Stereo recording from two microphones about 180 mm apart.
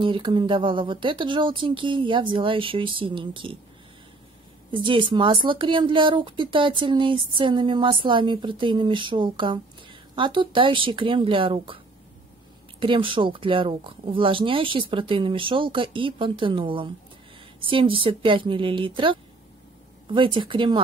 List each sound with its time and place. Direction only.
0.0 s a woman's voice: 25° right (ahead or behind)
4.6 s a woman's voice: 25° right (ahead or behind)
12.8 s a woman's voice: 30° right (ahead or behind)